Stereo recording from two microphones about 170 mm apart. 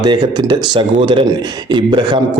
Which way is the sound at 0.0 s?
25° right (ahead or behind).